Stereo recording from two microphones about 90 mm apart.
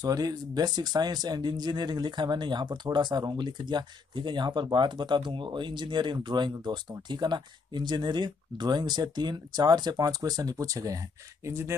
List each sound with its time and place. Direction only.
0.0 s speech: 45° right (ahead or behind)